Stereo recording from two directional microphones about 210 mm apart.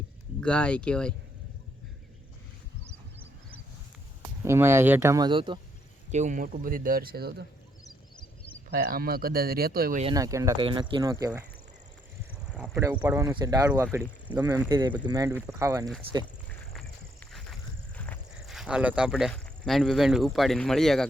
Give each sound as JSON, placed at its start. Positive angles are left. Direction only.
{"t": 0.4, "sound": "speech", "side_deg": 5}
{"t": 4.4, "sound": "speech", "side_deg": -10}
{"t": 6.1, "sound": "speech", "side_deg": -35}
{"t": 8.7, "sound": "speech", "side_deg": -45}
{"t": 10.0, "sound": "speech", "side_deg": -20}
{"t": 12.5, "sound": "a sound", "side_deg": -5}
{"t": 12.8, "sound": "speech", "side_deg": -10}
{"t": 16.5, "sound": "walk", "side_deg": 5}